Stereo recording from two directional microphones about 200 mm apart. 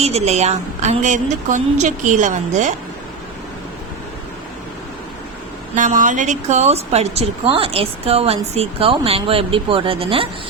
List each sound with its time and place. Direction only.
0.0 s a woman's voice: 35° right (ahead or behind)
5.7 s a woman's voice: 40° right (ahead or behind)